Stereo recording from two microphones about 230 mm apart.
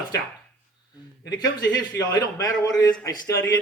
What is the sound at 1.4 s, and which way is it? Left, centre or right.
Speech, centre.